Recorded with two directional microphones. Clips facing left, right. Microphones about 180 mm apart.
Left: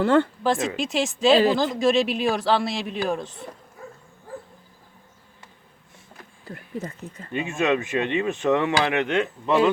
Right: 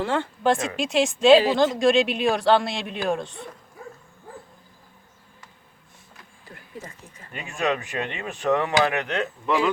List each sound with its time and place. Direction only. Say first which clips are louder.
0.0 s speech: left 7 dB; 55° left (ahead or behind)
0.4 s speech: right 1 dB; centre (ahead or behind)
7.3 s speech: left 3 dB; 20° left (ahead or behind)